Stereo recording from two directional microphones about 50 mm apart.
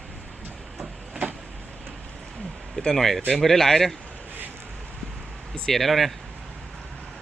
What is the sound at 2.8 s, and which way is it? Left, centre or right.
Speech, centre.